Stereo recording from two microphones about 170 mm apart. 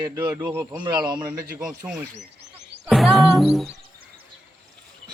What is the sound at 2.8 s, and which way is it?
Music, centre (ahead or behind).